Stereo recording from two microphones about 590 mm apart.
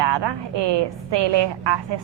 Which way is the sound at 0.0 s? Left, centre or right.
Right.